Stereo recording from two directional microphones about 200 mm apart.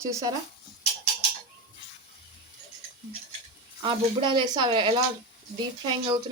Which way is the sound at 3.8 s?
25° right (ahead or behind).